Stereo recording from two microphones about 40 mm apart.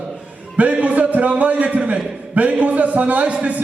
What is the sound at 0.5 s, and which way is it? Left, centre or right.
A man's voice, right.